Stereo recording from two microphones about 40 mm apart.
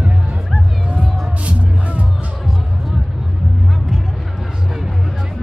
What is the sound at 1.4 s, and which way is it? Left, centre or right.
Music, right.